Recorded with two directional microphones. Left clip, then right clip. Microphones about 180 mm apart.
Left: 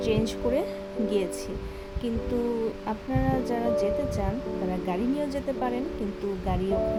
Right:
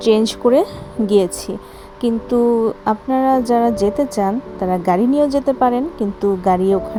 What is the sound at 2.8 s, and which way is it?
A woman's voice, 40° right (ahead or behind).